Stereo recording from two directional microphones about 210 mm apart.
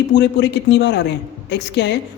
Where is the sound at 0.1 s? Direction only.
55° left (ahead or behind).